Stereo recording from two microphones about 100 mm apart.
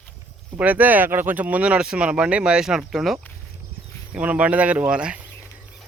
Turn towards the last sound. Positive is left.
turn(degrees=-10)  # may be behind; listen again after turning